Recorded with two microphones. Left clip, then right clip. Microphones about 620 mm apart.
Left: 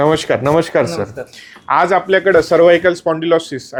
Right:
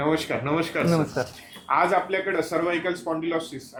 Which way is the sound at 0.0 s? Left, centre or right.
Left.